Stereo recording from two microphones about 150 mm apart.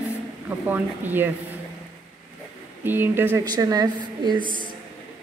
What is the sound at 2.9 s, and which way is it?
Speech, 15° right (ahead or behind).